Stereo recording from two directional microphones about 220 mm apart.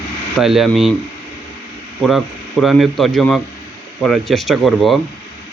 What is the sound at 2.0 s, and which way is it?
A man's voice, centre (ahead or behind).